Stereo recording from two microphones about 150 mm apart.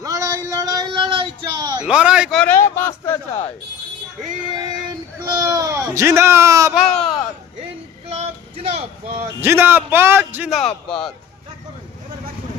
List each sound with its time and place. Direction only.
0.0 s a sound: 20° right (ahead or behind)
1.9 s a man's voice: 5° right (ahead or behind)
2.3 s a sound: 10° left (ahead or behind)
5.2 s speech: 25° right (ahead or behind)
6.7 s speech: centre (ahead or behind)
8.2 s male singing: 40° right (ahead or behind)
9.4 s a man's voice: 15° right (ahead or behind)
10.9 s speech: 5° left (ahead or behind)